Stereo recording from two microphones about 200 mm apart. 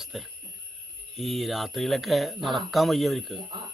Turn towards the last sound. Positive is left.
turn(degrees=-25)  # may be behind; listen again after turning